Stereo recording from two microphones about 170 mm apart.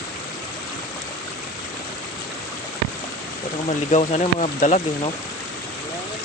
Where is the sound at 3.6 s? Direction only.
45° left (ahead or behind).